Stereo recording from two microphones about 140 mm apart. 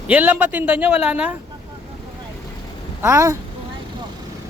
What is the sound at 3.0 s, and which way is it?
Speech, 20° right (ahead or behind).